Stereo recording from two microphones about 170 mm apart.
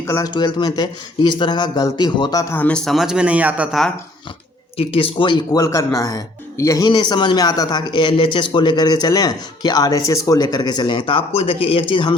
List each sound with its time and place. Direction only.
0.1 s speech: 20° left (ahead or behind); by 3.9 s centre (ahead or behind)
4.8 s speech: 35° left (ahead or behind)